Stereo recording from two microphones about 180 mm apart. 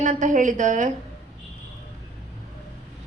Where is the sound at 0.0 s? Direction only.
45° right (ahead or behind).